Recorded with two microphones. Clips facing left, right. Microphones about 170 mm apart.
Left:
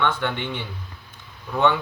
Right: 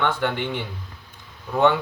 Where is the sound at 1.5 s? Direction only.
40° right (ahead or behind).